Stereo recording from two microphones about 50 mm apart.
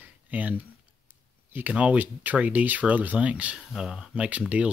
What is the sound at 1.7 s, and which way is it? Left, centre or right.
Speech, right.